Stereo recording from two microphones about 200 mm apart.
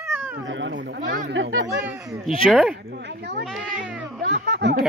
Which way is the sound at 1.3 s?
75° right (ahead or behind).